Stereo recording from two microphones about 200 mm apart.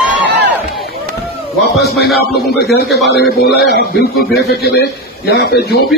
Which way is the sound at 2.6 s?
55° left (ahead or behind).